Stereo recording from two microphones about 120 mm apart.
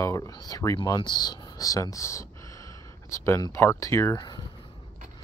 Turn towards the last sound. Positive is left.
turn(degrees=35)  # may be behind; listen again after turning